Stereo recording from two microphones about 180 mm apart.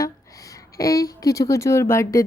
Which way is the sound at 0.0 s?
20° left (ahead or behind).